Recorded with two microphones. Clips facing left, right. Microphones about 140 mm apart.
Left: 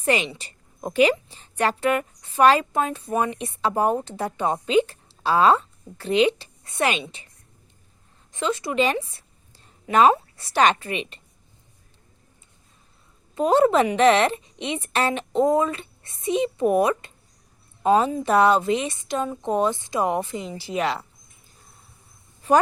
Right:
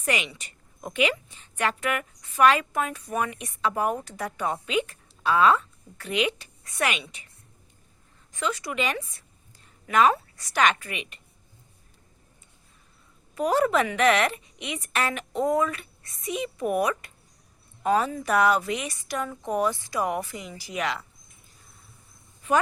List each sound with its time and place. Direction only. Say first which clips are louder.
0.0 s a woman's voice: left 6 dB; 30° left (ahead or behind)
8.3 s a woman's voice: left 4 dB; 25° left (ahead or behind)
13.3 s a woman's voice: left 5 dB; 25° left (ahead or behind)
22.4 s a woman's voice: left 5 dB; 35° left (ahead or behind)